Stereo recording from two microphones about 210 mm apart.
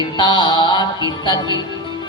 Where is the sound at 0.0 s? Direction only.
20° left (ahead or behind).